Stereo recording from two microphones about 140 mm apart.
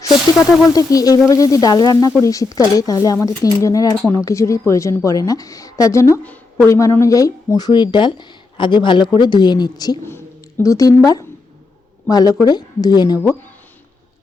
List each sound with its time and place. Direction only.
0.7 s speech: 25° left (ahead or behind)
10.0 s a woman's voice: 15° left (ahead or behind)